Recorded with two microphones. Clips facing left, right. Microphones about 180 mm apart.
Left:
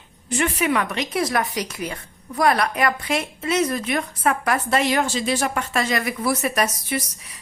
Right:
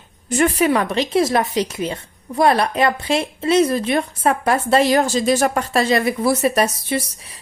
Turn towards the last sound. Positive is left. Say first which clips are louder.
# right 4 dB
turn(degrees=-30)  # may be behind; listen again after turning